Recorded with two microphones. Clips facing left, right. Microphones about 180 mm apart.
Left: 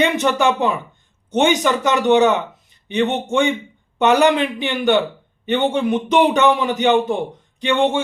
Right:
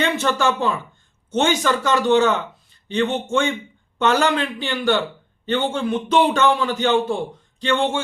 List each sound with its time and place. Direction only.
0.0 s a man's voice: 15° left (ahead or behind)